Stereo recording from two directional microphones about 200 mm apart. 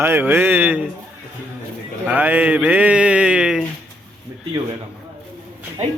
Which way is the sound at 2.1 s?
5° right (ahead or behind).